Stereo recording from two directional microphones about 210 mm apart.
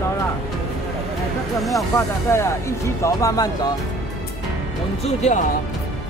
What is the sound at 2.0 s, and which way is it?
Speech, 15° left (ahead or behind).